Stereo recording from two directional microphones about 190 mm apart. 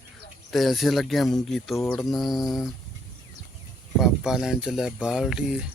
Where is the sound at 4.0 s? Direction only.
5° right (ahead or behind).